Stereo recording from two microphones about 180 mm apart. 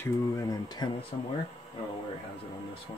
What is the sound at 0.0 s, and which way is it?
Speech, 20° left (ahead or behind).